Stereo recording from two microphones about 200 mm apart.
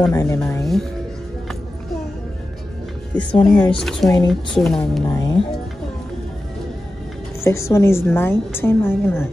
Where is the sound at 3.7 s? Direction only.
Centre (ahead or behind).